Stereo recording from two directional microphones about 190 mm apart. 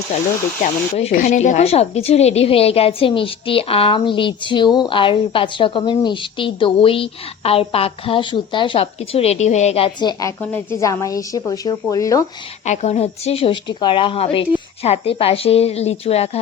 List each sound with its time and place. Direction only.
0.6 s speech: 40° left (ahead or behind); by 12.2 s 15° left (ahead or behind)
12.6 s a woman's voice: 35° left (ahead or behind)